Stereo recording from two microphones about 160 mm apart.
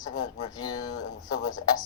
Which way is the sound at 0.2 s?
25° left (ahead or behind).